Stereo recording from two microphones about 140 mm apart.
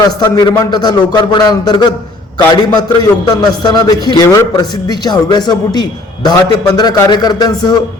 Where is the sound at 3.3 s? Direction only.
30° left (ahead or behind).